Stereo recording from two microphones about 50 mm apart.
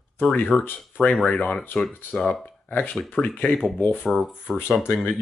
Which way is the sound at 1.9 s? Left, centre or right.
Left.